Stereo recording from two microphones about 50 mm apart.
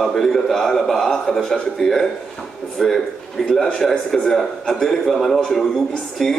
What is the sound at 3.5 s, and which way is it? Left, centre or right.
A man's voice, centre.